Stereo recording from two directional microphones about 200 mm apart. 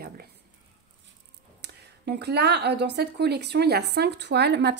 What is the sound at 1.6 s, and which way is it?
Speech, 55° right (ahead or behind).